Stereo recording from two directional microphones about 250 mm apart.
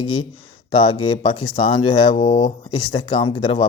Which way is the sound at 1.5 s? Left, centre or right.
Centre.